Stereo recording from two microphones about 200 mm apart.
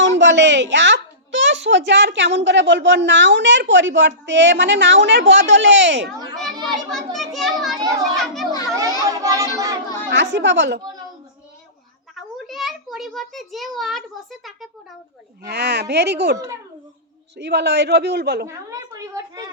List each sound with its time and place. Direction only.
0.0 s a woman's voice: 65° right (ahead or behind)
6.1 s a child's voice: centre (ahead or behind)
8.1 s children playing: centre (ahead or behind)
9.0 s a sound: 15° right (ahead or behind)
10.1 s a woman's voice: 60° right (ahead or behind)
12.1 s a child's voice: centre (ahead or behind)
15.4 s a woman's voice: 55° right (ahead or behind)
18.4 s a woman's voice: 15° right (ahead or behind)